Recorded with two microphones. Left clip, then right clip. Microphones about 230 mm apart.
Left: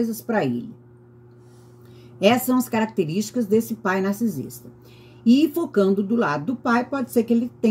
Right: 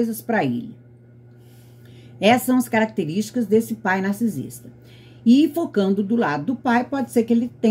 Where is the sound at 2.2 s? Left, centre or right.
Centre.